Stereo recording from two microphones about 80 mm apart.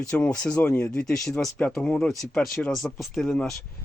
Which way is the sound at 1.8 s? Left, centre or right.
Centre.